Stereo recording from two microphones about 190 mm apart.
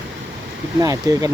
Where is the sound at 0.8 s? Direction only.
20° right (ahead or behind).